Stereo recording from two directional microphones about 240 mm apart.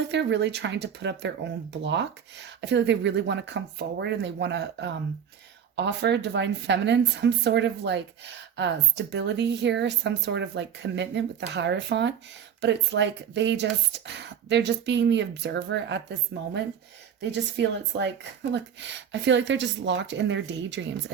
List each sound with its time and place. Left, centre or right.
0.1 s speech: right
17.2 s speech: right